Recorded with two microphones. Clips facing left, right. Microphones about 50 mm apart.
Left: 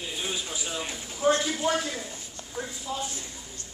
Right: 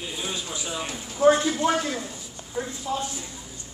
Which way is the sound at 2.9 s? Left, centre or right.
Right.